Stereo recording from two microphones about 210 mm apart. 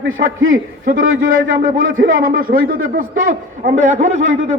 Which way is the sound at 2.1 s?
40° right (ahead or behind).